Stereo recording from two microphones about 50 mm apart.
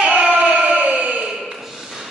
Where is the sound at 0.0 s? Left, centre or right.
Right.